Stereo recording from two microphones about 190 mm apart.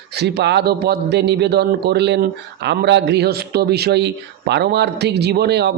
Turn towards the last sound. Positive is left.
turn(degrees=-60)  # may be behind; listen again after turning